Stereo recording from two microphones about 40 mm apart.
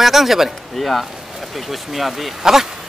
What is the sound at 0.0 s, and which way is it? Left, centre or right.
Speech, centre.